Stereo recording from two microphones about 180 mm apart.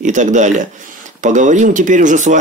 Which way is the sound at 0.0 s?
45° right (ahead or behind).